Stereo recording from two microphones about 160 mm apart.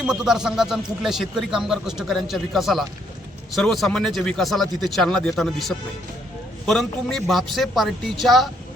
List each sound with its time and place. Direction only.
0.0 s speech: 5° right (ahead or behind)